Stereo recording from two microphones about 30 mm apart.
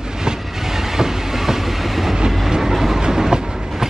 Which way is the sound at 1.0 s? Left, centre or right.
Centre.